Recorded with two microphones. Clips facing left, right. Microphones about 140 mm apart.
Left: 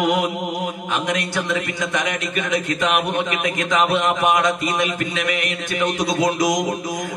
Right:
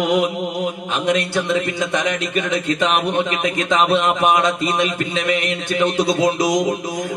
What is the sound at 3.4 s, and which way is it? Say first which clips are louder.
Mantra: right 2 dB; 25° right (ahead or behind).